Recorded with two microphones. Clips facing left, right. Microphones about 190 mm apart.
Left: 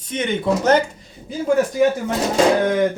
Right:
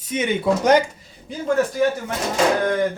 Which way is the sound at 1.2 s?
5° left (ahead or behind).